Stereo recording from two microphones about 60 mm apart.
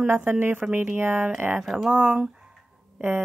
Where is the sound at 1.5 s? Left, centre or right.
Centre.